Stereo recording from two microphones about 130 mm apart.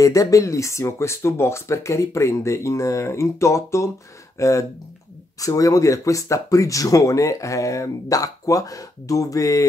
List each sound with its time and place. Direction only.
0.0 s speech: 25° left (ahead or behind)